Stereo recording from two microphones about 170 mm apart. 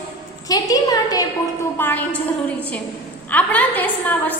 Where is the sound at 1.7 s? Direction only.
10° left (ahead or behind).